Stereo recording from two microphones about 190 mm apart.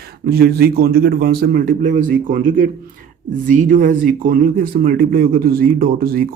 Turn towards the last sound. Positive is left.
turn(degrees=-50)  # may be behind; listen again after turning